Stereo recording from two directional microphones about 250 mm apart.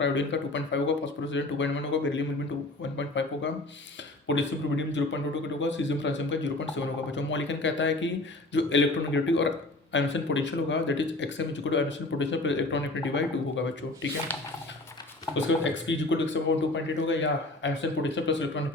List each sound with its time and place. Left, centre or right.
0.0 s a man's voice: left
15.4 s a man's voice: left